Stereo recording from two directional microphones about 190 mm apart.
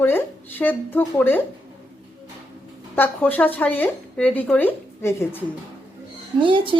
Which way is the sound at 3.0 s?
10° left (ahead or behind).